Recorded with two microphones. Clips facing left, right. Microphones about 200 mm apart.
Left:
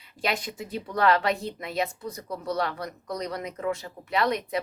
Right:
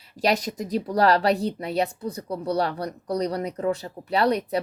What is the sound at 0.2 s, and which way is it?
Speech, 40° right (ahead or behind).